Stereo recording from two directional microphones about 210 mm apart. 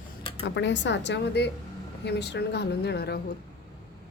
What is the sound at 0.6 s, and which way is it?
A woman's voice, 55° left (ahead or behind).